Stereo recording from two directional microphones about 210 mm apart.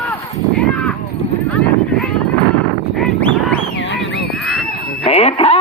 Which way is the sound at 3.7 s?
55° left (ahead or behind).